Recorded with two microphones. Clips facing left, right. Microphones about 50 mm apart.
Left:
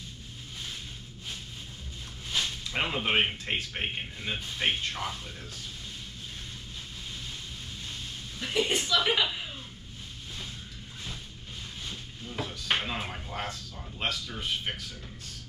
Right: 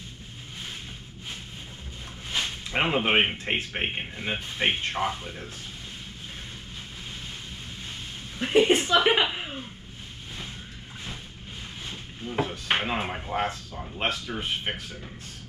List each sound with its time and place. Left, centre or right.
2.2 s speech: right
8.4 s a woman's voice: right
11.8 s speech: right